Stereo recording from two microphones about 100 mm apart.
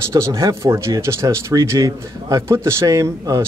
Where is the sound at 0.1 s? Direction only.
30° right (ahead or behind).